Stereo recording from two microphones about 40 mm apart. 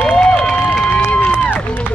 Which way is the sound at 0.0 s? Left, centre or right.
Centre.